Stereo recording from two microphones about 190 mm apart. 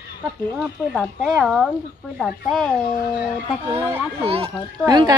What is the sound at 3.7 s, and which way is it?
Speech, 10° right (ahead or behind).